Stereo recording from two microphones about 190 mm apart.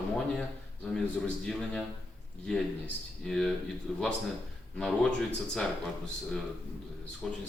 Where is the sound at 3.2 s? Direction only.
5° left (ahead or behind).